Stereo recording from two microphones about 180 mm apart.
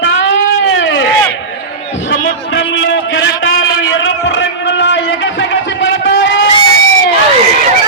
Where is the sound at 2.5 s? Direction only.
90° left.